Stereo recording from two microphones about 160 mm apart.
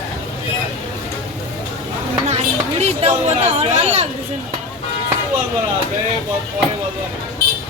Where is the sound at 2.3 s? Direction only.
45° right (ahead or behind).